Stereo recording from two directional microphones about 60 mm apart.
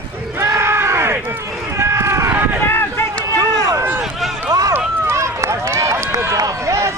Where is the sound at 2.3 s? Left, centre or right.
Right.